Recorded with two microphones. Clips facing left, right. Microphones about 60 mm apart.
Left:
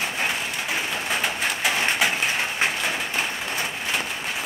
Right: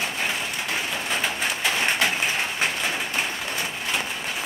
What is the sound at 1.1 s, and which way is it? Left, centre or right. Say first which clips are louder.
Bird: left 1 dB; centre.